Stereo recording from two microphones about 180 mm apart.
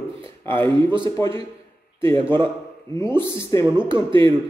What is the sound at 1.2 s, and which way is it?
Speech, 15° left (ahead or behind).